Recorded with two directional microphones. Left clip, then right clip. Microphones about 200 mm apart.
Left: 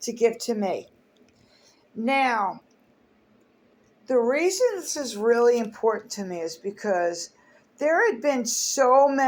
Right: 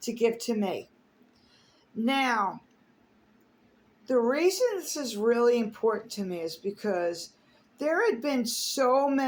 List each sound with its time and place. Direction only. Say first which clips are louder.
0.0 s speech: left 4 dB; 15° right (ahead or behind)
2.0 s speech: left 4 dB; 15° right (ahead or behind)
4.0 s speech: left 3 dB; 15° right (ahead or behind)